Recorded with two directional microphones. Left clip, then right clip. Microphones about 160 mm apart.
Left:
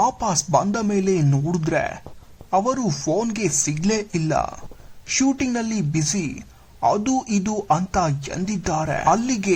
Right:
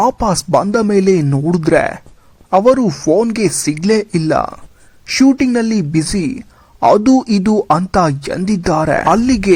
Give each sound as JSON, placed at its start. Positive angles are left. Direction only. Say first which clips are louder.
{"t": 0.0, "sound": "speech", "louder": "right 7 dB", "side_deg": -40}
{"t": 6.7, "sound": "speech", "louder": "right 10 dB", "side_deg": -55}